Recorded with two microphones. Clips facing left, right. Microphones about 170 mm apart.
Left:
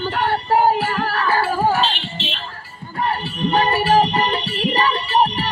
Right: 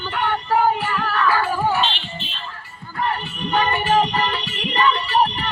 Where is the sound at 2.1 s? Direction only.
90° left.